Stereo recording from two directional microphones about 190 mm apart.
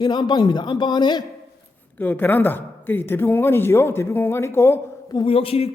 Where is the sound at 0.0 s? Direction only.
25° left (ahead or behind).